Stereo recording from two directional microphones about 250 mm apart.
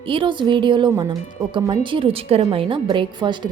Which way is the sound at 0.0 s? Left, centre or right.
Right.